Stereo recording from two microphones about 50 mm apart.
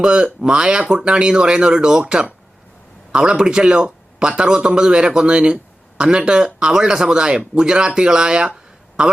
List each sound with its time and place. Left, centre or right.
0.0 s speech: centre